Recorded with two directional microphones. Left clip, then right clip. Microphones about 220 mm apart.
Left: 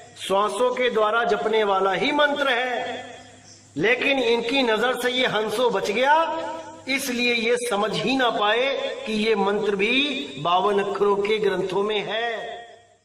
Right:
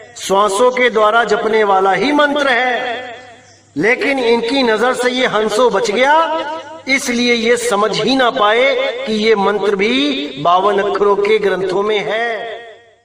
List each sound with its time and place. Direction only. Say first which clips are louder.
0.3 s a man's voice: right 9 dB; 35° right (ahead or behind)
4.3 s a man's voice: right 8 dB; 35° right (ahead or behind)